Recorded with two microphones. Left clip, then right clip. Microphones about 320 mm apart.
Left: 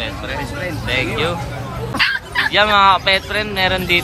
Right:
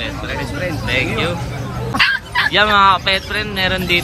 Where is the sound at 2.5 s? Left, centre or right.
Centre.